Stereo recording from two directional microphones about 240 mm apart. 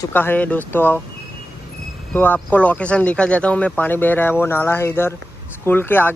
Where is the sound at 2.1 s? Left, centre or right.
Centre.